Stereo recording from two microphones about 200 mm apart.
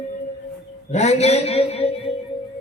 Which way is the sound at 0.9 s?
35° left (ahead or behind).